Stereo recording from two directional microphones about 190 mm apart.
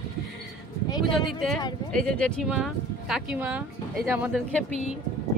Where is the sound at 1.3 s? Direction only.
Centre (ahead or behind).